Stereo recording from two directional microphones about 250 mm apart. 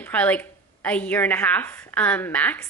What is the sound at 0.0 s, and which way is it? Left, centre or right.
A woman's voice, centre.